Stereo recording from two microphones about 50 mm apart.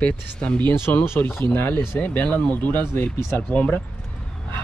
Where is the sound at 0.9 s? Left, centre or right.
Left.